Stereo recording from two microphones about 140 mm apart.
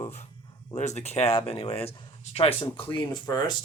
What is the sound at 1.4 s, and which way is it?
Speech, 40° left (ahead or behind).